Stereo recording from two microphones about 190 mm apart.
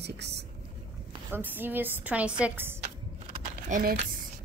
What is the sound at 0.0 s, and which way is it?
Speech, 60° right (ahead or behind).